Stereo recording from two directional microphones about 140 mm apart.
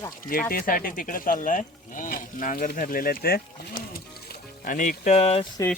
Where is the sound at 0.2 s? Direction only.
85° left; by 5.5 s 50° left (ahead or behind).